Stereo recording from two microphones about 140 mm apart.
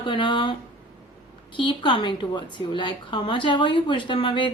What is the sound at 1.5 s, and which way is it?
A woman's voice, 35° left (ahead or behind).